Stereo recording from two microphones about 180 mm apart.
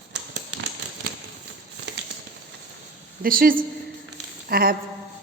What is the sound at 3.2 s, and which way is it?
A woman's voice, 50° right (ahead or behind).